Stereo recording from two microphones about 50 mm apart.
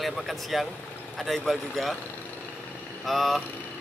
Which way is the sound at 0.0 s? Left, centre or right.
Centre.